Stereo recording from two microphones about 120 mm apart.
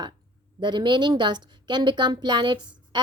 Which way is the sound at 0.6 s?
40° right (ahead or behind).